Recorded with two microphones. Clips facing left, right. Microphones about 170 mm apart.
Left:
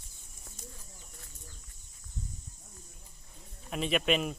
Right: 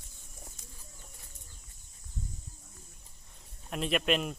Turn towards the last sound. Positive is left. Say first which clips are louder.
# left 1 dB
turn(degrees=0)  # may be behind; listen again after turning